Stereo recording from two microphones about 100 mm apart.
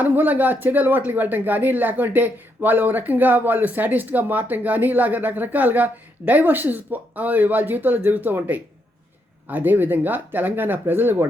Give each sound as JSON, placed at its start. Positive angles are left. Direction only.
{"t": 0.0, "sound": "speech", "side_deg": -15}